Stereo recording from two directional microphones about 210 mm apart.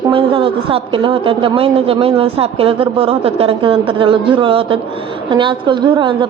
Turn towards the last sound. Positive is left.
turn(degrees=-25)  # may be behind; listen again after turning